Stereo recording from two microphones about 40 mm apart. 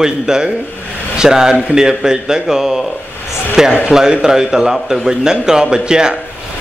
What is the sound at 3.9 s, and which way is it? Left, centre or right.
Speech, centre.